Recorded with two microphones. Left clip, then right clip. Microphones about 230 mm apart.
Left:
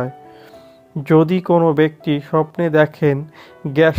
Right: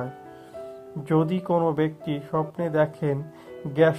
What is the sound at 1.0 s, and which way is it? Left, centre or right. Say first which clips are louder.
Speech: left 10 dB; left.